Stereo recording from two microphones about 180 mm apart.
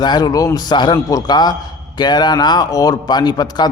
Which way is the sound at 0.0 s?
25° left (ahead or behind).